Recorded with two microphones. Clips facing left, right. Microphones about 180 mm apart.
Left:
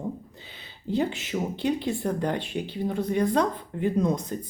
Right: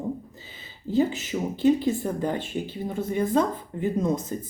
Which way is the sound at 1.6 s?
5° right (ahead or behind).